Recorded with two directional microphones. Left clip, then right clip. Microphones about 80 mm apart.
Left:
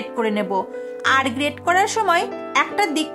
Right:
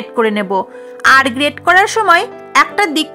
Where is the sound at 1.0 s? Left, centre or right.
Right.